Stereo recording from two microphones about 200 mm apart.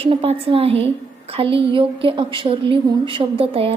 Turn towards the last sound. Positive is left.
turn(degrees=-30)  # may be behind; listen again after turning